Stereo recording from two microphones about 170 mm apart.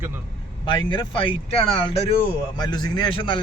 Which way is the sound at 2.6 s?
25° left (ahead or behind).